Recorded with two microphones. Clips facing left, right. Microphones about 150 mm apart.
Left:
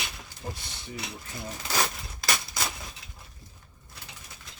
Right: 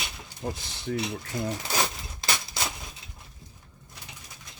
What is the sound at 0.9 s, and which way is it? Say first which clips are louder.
Speech: right 10 dB; 75° right (ahead or behind).